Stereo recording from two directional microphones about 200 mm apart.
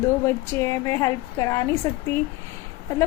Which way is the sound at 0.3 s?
15° left (ahead or behind).